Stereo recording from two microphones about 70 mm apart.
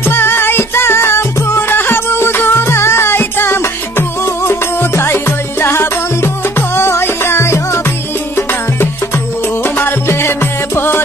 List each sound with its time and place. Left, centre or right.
0.0 s music: left
9.6 s music: left